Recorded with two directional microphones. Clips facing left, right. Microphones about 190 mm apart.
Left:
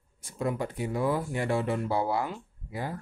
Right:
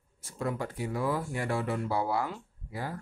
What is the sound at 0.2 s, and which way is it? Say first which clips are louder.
Speech: left 3 dB; 15° left (ahead or behind).